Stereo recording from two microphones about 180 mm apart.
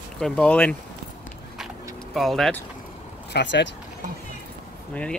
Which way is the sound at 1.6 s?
Centre (ahead or behind).